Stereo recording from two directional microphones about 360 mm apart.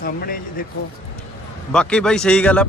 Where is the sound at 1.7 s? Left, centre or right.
Centre.